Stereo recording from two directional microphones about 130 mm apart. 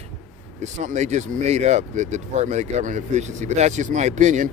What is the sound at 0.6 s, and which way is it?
Speech, 65° right (ahead or behind).